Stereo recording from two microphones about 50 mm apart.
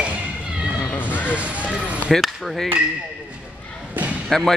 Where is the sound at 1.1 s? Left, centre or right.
Left.